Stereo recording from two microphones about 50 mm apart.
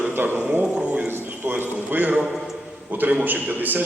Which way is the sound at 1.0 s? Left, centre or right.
Right.